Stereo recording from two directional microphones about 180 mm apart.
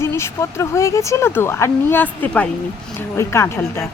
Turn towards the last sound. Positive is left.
turn(degrees=15)  # may be behind; listen again after turning